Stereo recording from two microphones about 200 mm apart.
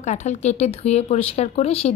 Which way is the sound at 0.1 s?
35° left (ahead or behind).